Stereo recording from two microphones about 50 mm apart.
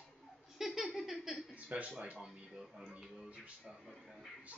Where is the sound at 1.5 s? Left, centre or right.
Right.